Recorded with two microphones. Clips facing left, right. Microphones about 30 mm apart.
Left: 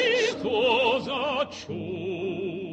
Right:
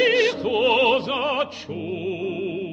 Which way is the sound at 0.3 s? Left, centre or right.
Centre.